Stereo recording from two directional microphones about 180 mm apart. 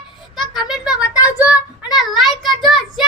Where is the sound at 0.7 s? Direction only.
5° right (ahead or behind).